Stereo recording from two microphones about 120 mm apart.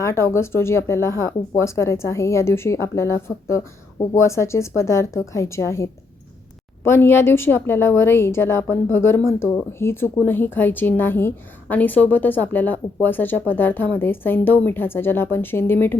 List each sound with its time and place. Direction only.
0.0 s a woman's voice: 25° left (ahead or behind)